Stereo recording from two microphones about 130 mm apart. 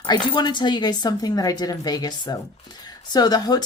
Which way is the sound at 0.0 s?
35° left (ahead or behind).